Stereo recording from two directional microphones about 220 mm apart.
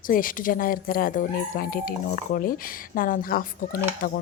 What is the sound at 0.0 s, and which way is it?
Speech, 40° left (ahead or behind).